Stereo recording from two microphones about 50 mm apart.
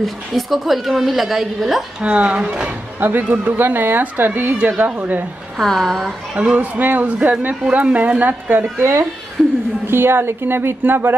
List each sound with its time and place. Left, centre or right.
0.0 s a woman's voice: centre
2.0 s speech: right
3.0 s speech: right
4.6 s speech: right
5.6 s a woman's voice: centre
6.3 s speech: right
9.8 s speech: right